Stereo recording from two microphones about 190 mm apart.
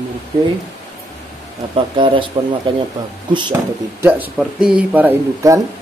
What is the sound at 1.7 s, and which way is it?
Speech, 25° right (ahead or behind).